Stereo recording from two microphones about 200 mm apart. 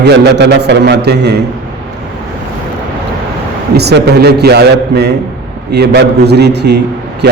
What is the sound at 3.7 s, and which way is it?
A man's voice, 55° right (ahead or behind).